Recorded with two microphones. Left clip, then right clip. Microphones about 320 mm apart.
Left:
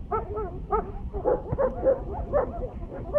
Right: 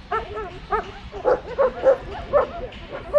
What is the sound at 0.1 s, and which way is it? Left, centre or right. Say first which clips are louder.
Dog: right 3 dB; right.